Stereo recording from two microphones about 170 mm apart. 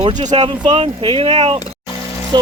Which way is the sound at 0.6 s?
30° right (ahead or behind).